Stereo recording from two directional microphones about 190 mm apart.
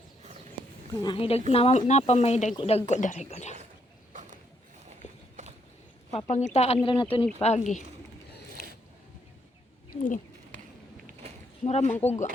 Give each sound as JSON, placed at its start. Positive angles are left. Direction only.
{"t": 1.0, "sound": "a woman's voice", "side_deg": 30}
{"t": 4.1, "sound": "a sound", "side_deg": -40}
{"t": 6.1, "sound": "a woman's voice", "side_deg": 30}
{"t": 7.4, "sound": "speech", "side_deg": 35}
{"t": 8.4, "sound": "filing", "side_deg": 55}
{"t": 11.2, "sound": "a sound", "side_deg": -30}
{"t": 11.6, "sound": "speech", "side_deg": 35}